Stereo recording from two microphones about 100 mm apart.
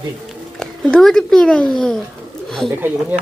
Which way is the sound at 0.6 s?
5° left (ahead or behind).